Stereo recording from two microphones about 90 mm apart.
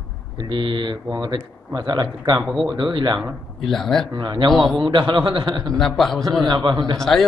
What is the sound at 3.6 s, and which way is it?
Speech, 5° left (ahead or behind).